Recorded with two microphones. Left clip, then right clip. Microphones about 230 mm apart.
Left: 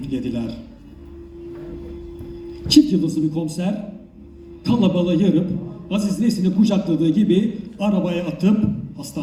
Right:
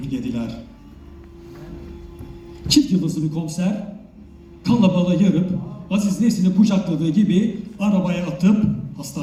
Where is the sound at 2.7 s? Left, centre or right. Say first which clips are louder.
Left 3 dB; right.